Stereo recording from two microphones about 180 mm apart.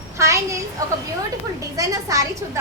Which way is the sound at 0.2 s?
15° right (ahead or behind).